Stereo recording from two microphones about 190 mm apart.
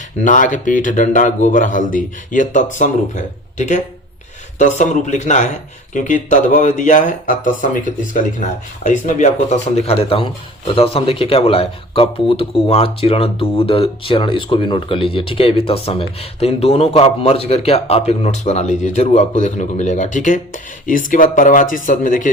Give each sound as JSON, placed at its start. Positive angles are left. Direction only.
{"t": 0.2, "sound": "speech", "side_deg": 40}
{"t": 4.5, "sound": "speech", "side_deg": 40}